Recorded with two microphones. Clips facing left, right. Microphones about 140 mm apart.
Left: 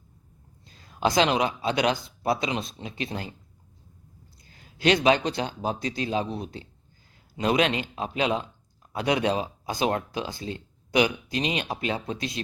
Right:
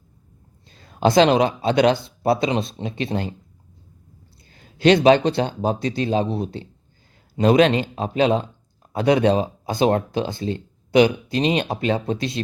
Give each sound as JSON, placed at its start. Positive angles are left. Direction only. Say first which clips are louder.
{"t": 0.9, "sound": "speech", "louder": "right 7 dB", "side_deg": -30}
{"t": 4.5, "sound": "speech", "louder": "right 7 dB", "side_deg": -30}